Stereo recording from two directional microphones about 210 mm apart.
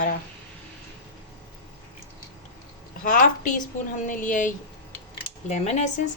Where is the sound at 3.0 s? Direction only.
35° left (ahead or behind).